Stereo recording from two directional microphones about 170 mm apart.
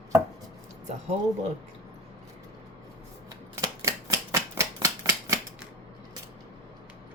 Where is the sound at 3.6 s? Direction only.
20° right (ahead or behind).